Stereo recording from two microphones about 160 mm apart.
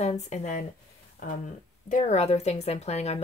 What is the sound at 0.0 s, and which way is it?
Speech, 45° left (ahead or behind).